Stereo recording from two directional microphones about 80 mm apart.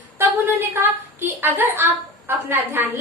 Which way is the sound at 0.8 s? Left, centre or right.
Right.